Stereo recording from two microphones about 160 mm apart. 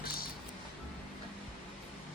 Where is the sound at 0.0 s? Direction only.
70° left (ahead or behind).